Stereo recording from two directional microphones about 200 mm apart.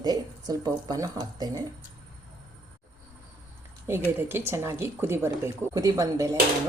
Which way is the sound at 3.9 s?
10° right (ahead or behind).